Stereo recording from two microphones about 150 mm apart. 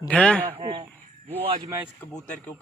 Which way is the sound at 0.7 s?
30° right (ahead or behind).